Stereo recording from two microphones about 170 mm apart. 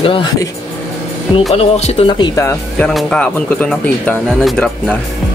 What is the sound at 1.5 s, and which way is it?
Speech, 35° left (ahead or behind).